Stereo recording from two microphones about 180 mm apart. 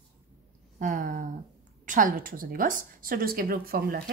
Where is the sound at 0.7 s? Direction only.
45° right (ahead or behind).